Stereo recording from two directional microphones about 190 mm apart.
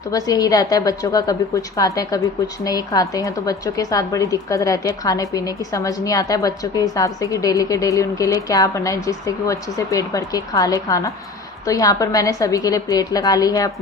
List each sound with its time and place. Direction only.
0.1 s a woman's voice: 20° left (ahead or behind)